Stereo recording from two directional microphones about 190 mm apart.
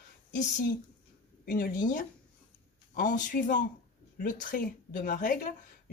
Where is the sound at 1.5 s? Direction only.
50° left (ahead or behind).